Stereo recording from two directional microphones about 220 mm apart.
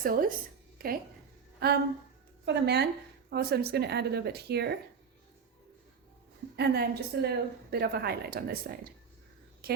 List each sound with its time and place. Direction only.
0.0 s a woman's voice: 40° right (ahead or behind)
1.5 s a woman's voice: 45° right (ahead or behind)
6.6 s a woman's voice: 50° right (ahead or behind)